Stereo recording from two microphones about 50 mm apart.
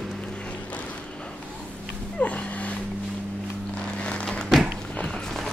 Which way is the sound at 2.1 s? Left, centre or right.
Left.